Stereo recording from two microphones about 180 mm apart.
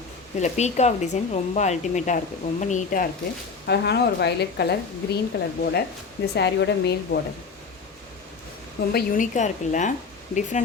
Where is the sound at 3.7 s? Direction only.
65° left (ahead or behind).